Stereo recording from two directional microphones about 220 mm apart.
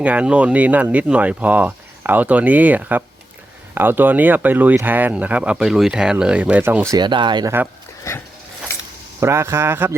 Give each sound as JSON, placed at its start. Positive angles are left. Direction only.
{"t": 0.0, "sound": "speech", "side_deg": -5}
{"t": 6.9, "sound": "speech", "side_deg": -20}
{"t": 9.2, "sound": "speech", "side_deg": -10}